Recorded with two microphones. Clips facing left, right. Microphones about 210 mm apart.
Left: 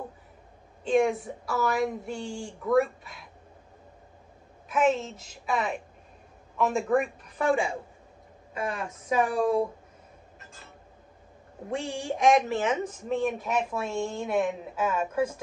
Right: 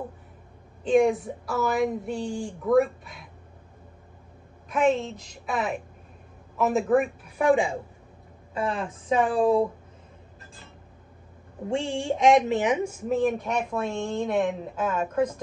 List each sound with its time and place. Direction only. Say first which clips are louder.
0.8 s speech: right 3 dB; centre (ahead or behind)
4.6 s speech: right 2 dB; 5° left (ahead or behind); by 7.7 s 15° right (ahead or behind)
8.5 s speech: right 4 dB; 30° right (ahead or behind)
11.7 s speech: right 4 dB; 25° right (ahead or behind); by 15.4 s 10° left (ahead or behind)